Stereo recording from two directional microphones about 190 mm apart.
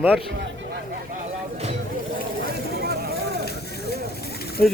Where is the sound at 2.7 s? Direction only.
55° right (ahead or behind).